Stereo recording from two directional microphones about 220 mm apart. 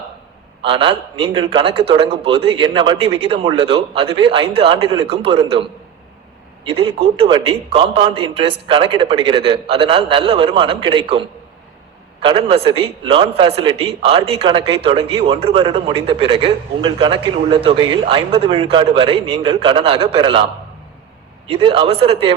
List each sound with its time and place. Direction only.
0.6 s speech: 25° right (ahead or behind)
6.7 s speech: 25° right (ahead or behind)